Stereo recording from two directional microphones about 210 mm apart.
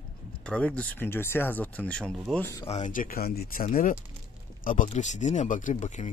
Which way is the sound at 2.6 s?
30° left (ahead or behind).